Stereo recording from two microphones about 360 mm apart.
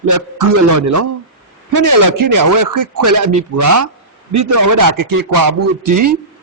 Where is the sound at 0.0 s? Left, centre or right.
Right.